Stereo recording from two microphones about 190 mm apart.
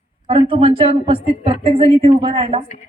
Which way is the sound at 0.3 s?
30° right (ahead or behind).